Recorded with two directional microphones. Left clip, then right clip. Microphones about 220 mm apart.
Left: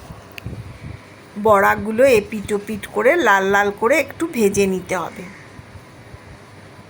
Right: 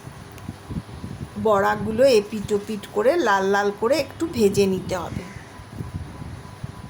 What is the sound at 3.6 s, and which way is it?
A woman's voice, 5° left (ahead or behind).